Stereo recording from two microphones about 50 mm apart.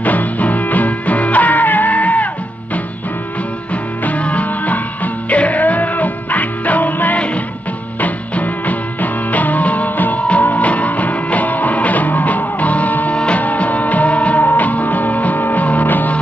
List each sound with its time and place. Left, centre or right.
0.0 s music: left
4.0 s music: left